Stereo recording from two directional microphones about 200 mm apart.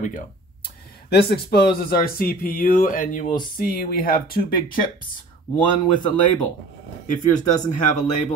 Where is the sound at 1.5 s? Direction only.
50° left (ahead or behind).